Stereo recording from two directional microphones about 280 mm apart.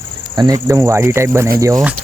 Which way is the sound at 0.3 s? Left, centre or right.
Centre.